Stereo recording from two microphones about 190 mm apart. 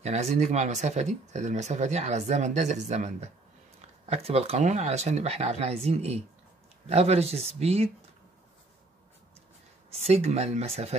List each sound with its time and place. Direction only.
0.0 s speech: 35° right (ahead or behind)
9.9 s speech: 30° right (ahead or behind)